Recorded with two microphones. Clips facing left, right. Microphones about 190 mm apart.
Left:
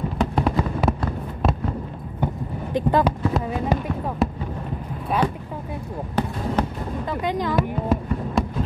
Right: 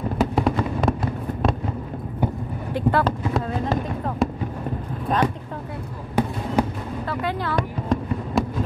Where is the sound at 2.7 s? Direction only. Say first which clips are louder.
Left 1 dB; 15° left (ahead or behind).